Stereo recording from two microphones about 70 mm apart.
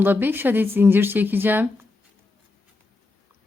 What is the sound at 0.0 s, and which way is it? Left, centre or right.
A woman's voice, right.